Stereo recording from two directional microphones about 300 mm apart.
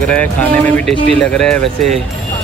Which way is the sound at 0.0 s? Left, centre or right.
Centre.